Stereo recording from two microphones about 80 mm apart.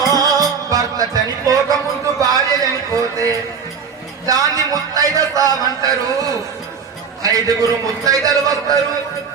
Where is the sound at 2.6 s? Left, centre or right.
Right.